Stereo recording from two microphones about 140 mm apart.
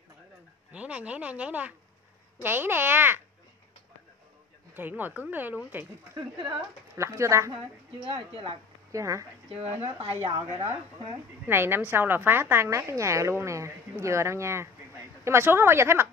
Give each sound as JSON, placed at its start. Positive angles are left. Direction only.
{"t": 0.7, "sound": "speech", "side_deg": -10}
{"t": 4.7, "sound": "speech", "side_deg": -15}
{"t": 7.0, "sound": "a woman's voice", "side_deg": -20}
{"t": 8.0, "sound": "speech", "side_deg": -40}
{"t": 8.9, "sound": "a woman's voice", "side_deg": -20}
{"t": 9.6, "sound": "speech", "side_deg": -45}
{"t": 11.4, "sound": "a woman's voice", "side_deg": -15}